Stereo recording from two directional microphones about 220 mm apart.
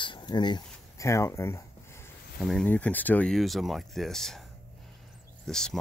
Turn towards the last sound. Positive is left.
turn(degrees=0)  # may be behind; listen again after turning